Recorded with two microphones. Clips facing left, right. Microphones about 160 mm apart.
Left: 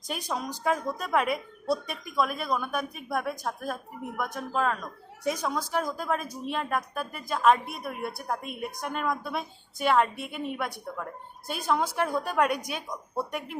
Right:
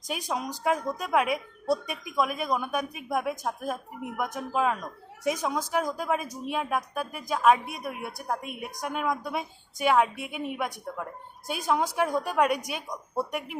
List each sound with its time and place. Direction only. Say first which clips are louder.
0.3 s speech: right 1 dB; 15° right (ahead or behind)